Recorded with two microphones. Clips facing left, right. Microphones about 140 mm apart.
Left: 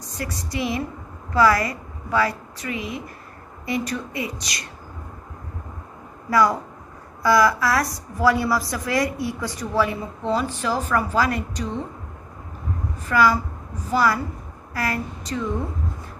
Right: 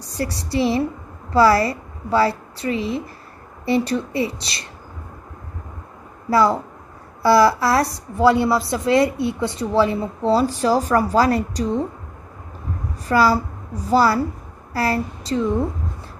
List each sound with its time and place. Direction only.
0.0 s a woman's voice: 35° right (ahead or behind)
6.3 s a woman's voice: 30° right (ahead or behind)
13.0 s a woman's voice: 35° right (ahead or behind)